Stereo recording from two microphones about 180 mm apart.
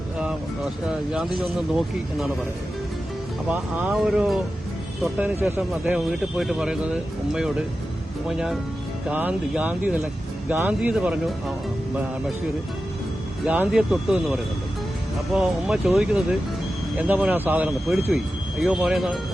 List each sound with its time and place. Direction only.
0.2 s speech: 5° right (ahead or behind)
3.5 s speech: 10° right (ahead or behind)
9.0 s speech: 10° right (ahead or behind)
13.4 s speech: 5° right (ahead or behind)